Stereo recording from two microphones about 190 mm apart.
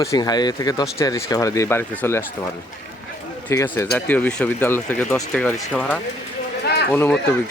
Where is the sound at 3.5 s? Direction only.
15° left (ahead or behind).